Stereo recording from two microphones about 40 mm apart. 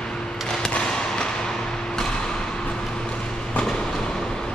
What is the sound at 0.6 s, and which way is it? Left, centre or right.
Basketball bounce, left.